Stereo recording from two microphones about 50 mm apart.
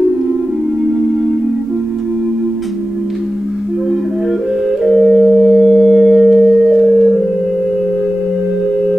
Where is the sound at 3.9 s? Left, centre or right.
Centre.